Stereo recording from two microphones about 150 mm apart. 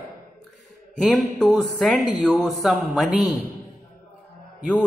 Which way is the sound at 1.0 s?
Centre (ahead or behind).